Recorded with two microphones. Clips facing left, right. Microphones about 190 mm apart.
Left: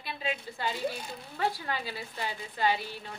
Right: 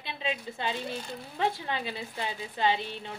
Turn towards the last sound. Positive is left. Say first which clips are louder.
# right 1 dB
turn(degrees=-25)  # may be behind; listen again after turning